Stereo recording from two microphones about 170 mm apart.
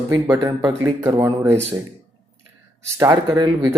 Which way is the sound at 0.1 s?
20° right (ahead or behind).